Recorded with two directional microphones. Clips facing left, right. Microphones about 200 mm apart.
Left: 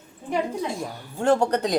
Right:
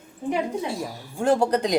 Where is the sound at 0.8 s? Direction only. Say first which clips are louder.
Left 2 dB; 10° right (ahead or behind).